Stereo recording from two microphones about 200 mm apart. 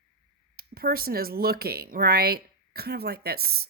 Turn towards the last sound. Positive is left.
turn(degrees=-50)  # may be behind; listen again after turning